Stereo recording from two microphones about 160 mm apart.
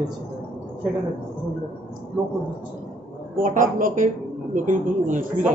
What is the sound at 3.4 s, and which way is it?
A woman's voice, 55° right (ahead or behind).